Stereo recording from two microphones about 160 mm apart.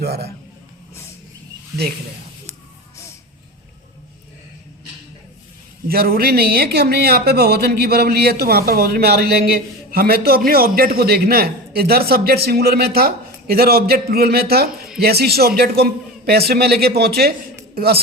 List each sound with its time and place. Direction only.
0.0 s a man's voice: 85° right
5.9 s a man's voice: 70° right (ahead or behind)